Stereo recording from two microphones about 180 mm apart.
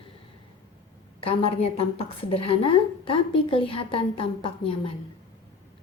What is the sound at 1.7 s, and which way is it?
A woman's voice, 30° left (ahead or behind).